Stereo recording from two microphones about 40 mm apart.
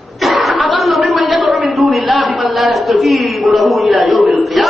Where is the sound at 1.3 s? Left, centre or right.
Right.